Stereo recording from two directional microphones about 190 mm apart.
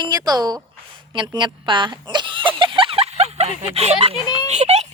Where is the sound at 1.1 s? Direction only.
25° right (ahead or behind).